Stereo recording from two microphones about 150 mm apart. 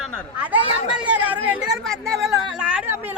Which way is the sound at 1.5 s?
5° right (ahead or behind).